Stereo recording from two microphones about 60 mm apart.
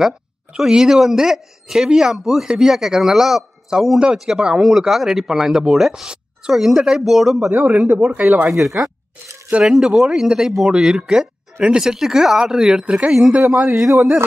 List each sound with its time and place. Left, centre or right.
0.6 s speech: centre
7.5 s a man's voice: right
8.5 s speech: centre